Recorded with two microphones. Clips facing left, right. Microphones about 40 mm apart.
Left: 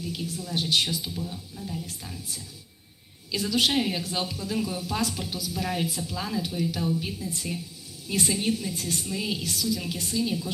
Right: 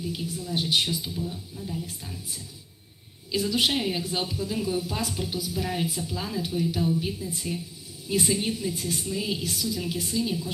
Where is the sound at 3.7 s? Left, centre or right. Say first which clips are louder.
Left 1 dB; centre.